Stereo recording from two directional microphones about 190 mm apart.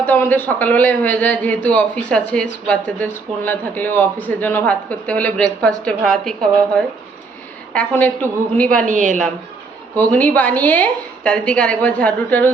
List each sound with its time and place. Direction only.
0.0 s a man's voice: 10° left (ahead or behind)
8.9 s a woman's voice: 40° right (ahead or behind)
9.9 s a man's voice: 10° left (ahead or behind)